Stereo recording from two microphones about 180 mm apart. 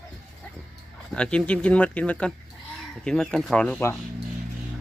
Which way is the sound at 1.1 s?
5° left (ahead or behind).